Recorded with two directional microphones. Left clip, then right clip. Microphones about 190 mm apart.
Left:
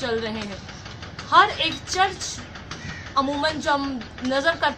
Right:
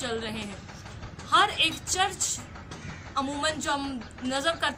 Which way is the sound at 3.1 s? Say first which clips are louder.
Left 6 dB; 15° right (ahead or behind).